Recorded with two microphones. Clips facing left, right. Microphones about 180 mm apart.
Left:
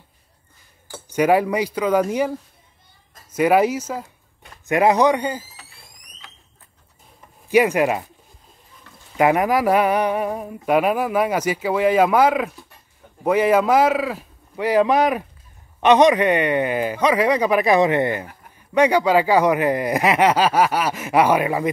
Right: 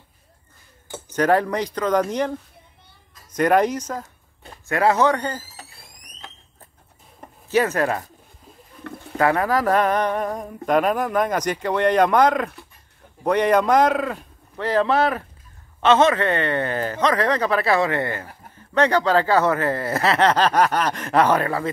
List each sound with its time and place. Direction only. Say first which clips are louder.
1.1 s a man's voice: left 2 dB; 10° left (ahead or behind)
3.3 s a man's voice: left 1 dB; 5° left (ahead or behind)
7.4 s a man's voice: left 3 dB; 15° left (ahead or behind)
8.8 s a sound: right 16 dB; 60° right (ahead or behind)
9.2 s a man's voice: left 2 dB; 15° left (ahead or behind)